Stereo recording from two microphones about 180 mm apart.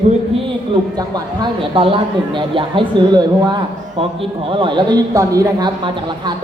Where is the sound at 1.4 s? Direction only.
30° right (ahead or behind).